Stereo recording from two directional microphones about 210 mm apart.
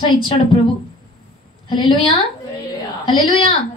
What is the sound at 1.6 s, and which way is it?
Speech, 20° left (ahead or behind).